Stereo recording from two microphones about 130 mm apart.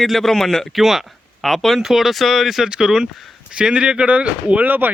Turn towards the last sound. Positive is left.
turn(degrees=-15)  # may be behind; listen again after turning